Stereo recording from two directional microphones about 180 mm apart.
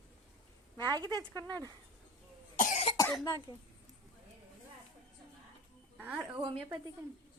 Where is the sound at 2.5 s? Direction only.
45° left (ahead or behind).